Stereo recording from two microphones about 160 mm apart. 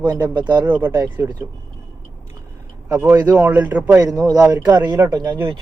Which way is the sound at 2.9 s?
10° right (ahead or behind).